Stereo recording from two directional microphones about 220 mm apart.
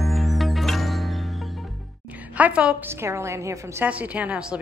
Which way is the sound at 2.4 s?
5° right (ahead or behind).